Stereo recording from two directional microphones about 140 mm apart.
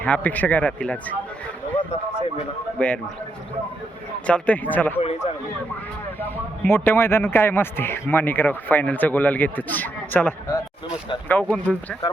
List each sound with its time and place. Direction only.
0.0 s a man's voice: 10° left (ahead or behind)
2.7 s a man's voice: 10° left (ahead or behind)
4.3 s a man's voice: 10° left (ahead or behind)
4.9 s speech: 45° left (ahead or behind)
6.2 s a man's voice: 15° left (ahead or behind)